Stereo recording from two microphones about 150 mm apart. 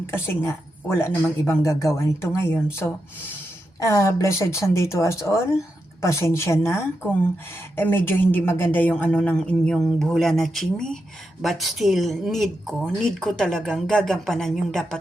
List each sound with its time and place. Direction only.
0.0 s speech: 15° left (ahead or behind)
3.8 s speech: 20° left (ahead or behind)
7.8 s a woman's voice: 15° left (ahead or behind)